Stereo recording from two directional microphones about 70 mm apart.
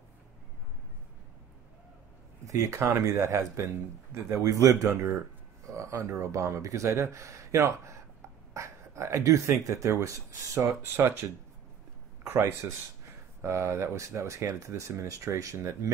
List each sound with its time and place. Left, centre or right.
2.4 s speech: right
10.8 s speech: right
12.3 s speech: right